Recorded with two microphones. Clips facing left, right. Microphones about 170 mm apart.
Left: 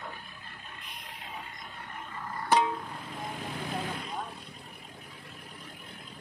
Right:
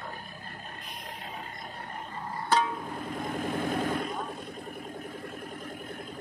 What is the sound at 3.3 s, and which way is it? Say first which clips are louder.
Vehicle: right 7 dB; 50° right (ahead or behind).